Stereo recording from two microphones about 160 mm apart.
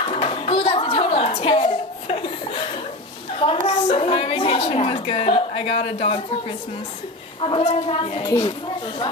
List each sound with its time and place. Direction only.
0.0 s a sound: 35° left (ahead or behind)
3.3 s a woman's voice: 35° left (ahead or behind)
7.3 s a woman's voice: 35° left (ahead or behind)